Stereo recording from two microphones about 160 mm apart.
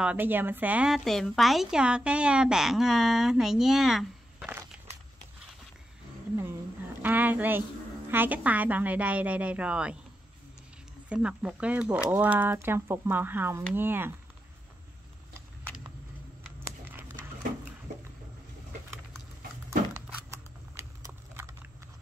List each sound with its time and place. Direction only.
0.0 s a woman's voice: 10° right (ahead or behind)
7.0 s a woman's voice: 10° right (ahead or behind)
11.1 s speech: 5° right (ahead or behind)
16.5 s a sound: 15° right (ahead or behind)
21.0 s computer keyboard: 15° right (ahead or behind)